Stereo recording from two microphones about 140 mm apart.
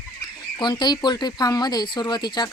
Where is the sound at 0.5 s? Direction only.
30° left (ahead or behind).